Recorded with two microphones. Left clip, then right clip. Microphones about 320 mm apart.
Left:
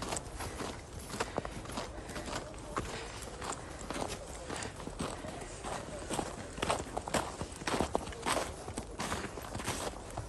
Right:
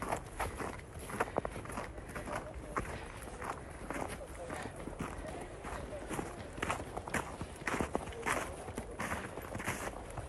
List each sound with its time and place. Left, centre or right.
1.1 s walk: centre
2.3 s clip-clop: centre
3.4 s walk: centre
6.1 s walk: centre